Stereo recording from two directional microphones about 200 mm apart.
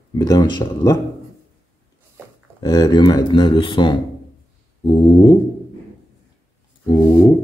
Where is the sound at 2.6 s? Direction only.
20° left (ahead or behind).